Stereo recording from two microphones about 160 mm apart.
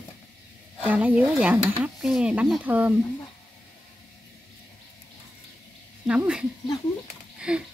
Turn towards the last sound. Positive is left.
turn(degrees=-5)  # may be behind; listen again after turning